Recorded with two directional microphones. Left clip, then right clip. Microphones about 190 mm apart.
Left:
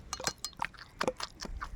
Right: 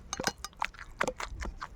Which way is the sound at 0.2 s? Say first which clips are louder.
Right 3 dB; 25° right (ahead or behind).